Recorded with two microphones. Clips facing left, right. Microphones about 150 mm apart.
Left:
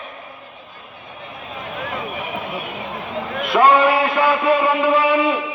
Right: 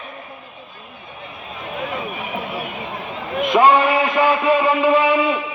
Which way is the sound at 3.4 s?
15° right (ahead or behind).